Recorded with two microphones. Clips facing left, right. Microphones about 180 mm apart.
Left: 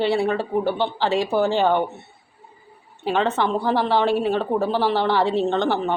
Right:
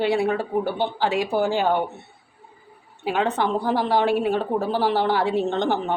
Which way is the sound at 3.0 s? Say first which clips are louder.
Left 1 dB; 10° right (ahead or behind).